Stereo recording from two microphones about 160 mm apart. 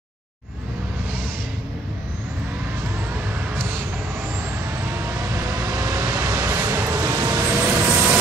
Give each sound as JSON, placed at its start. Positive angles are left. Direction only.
{"t": 5.3, "sound": "vehicle", "side_deg": -20}